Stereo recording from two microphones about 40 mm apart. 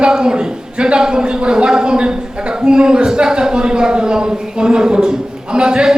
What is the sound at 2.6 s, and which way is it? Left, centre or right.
A man's voice, centre.